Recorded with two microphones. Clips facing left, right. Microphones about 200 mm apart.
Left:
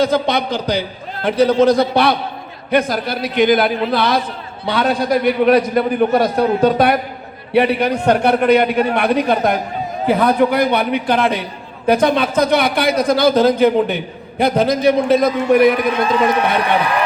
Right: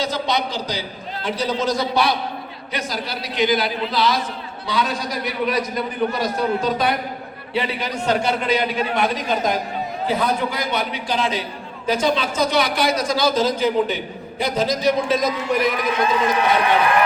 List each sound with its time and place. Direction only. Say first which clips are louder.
0.0 s a man's voice: left 7 dB; 55° left (ahead or behind)